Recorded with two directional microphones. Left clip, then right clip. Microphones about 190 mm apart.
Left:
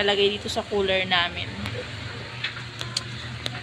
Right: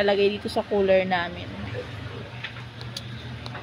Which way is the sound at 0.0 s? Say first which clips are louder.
Even; 50° right (ahead or behind).